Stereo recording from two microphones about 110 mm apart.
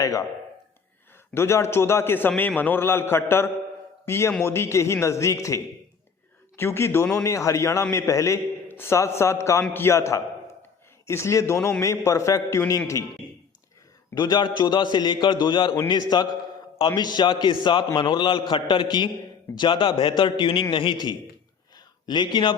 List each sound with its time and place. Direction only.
0.0 s speech: 30° left (ahead or behind)
1.3 s a man's voice: 25° left (ahead or behind)
14.2 s a man's voice: 40° left (ahead or behind)
22.0 s a man's voice: 40° left (ahead or behind)